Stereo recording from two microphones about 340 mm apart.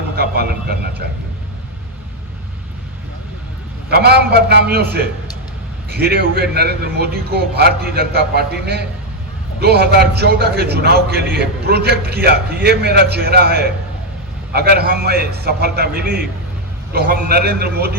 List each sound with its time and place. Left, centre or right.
0.2 s a sound: right
3.8 s a man's voice: right
5.9 s a man's voice: right